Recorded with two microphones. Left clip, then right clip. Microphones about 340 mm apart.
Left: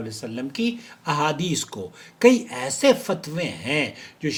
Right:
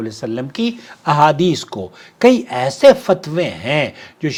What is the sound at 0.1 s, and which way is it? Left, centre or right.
Speech, right.